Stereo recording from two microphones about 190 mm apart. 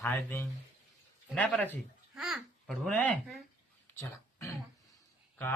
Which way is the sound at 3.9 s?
15° left (ahead or behind).